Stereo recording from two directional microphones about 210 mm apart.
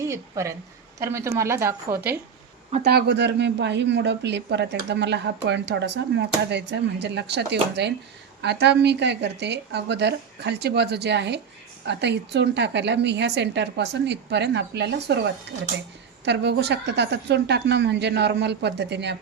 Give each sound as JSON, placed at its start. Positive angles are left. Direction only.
{"t": 0.0, "sound": "a woman's voice", "side_deg": -15}
{"t": 2.9, "sound": "a woman's voice", "side_deg": -55}